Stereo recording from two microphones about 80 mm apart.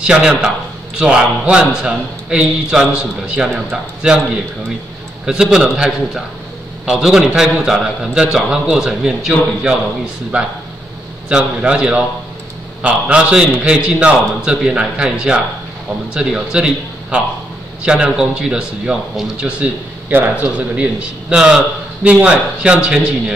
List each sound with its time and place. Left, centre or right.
0.0 s a man's voice: centre
5.2 s a man's voice: centre
20.1 s speech: right
20.4 s a man's voice: centre